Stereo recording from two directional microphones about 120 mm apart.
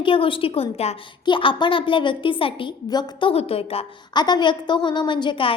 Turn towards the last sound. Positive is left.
turn(degrees=45)  # may be behind; listen again after turning